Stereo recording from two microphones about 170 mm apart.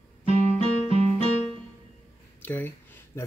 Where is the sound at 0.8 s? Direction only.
35° right (ahead or behind).